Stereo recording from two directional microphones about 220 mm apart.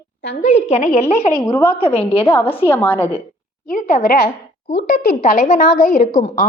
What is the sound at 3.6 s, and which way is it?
A woman's voice, 35° left (ahead or behind).